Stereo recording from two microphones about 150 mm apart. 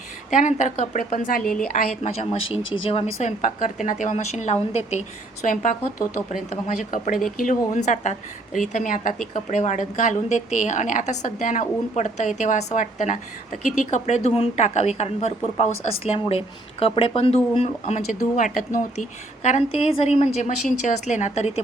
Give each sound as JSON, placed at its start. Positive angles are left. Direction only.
{"t": 0.3, "sound": "a woman's voice", "side_deg": 55}
{"t": 7.7, "sound": "a woman's voice", "side_deg": 55}